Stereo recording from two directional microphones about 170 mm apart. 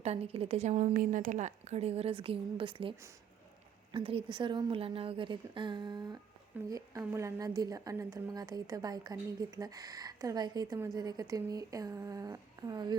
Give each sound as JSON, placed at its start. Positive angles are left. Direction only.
{"t": 0.0, "sound": "a woman's voice", "side_deg": -40}
{"t": 3.9, "sound": "a woman's voice", "side_deg": -30}